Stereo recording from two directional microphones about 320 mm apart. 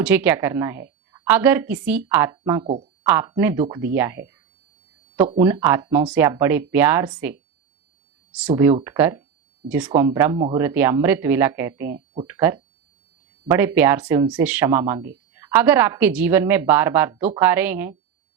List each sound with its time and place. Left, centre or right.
0.0 s a woman's voice: centre
2.6 s speech: centre
3.0 s a woman's voice: centre
5.4 s a woman's voice: centre